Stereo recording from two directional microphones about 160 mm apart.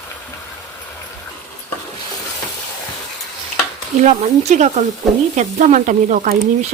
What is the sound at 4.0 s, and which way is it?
Speech, 50° right (ahead or behind).